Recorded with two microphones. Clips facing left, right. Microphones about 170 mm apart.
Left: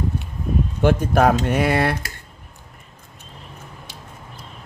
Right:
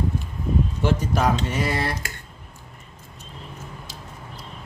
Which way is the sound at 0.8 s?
55° left (ahead or behind).